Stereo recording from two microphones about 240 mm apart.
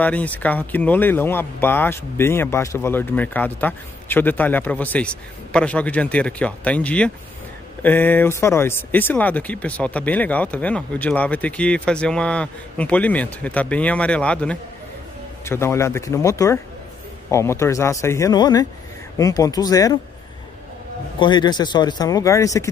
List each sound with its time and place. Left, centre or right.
0.0 s speech: centre
21.2 s speech: centre